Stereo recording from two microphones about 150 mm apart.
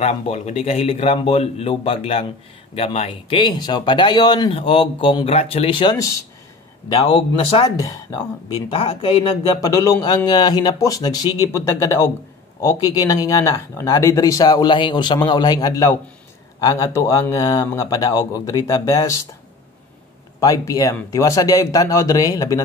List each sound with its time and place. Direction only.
0.0 s speech: 45° left (ahead or behind)
5.9 s speech: 20° left (ahead or behind)
7.1 s speech: 35° left (ahead or behind)
7.7 s speech: 25° left (ahead or behind)
8.6 s speech: 40° left (ahead or behind)
9.6 s speech: 20° left (ahead or behind)
20.3 s speech: 20° left (ahead or behind)